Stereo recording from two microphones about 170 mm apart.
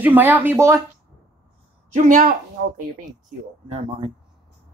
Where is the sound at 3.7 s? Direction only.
40° right (ahead or behind).